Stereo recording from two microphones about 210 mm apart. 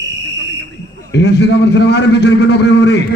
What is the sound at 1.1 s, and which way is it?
A man's voice, 55° left (ahead or behind).